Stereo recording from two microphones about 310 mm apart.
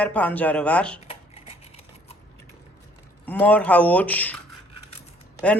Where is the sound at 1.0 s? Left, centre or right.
Centre.